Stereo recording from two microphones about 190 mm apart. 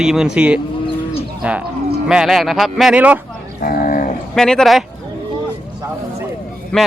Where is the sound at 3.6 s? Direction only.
50° left (ahead or behind).